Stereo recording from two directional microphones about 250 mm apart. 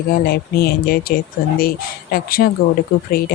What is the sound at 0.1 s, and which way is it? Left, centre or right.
Speech, left.